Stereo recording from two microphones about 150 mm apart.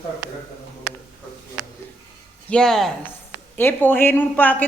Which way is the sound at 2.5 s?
5° left (ahead or behind).